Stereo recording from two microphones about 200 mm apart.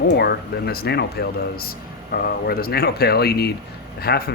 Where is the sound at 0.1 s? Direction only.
55° left (ahead or behind).